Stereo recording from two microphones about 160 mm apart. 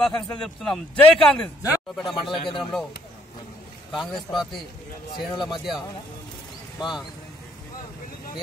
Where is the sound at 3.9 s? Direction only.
Centre (ahead or behind).